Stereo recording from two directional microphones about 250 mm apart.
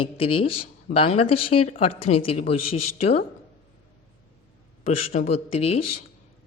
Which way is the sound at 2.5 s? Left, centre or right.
Left.